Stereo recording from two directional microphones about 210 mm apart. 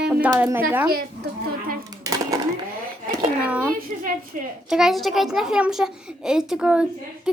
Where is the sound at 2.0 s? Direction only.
15° right (ahead or behind).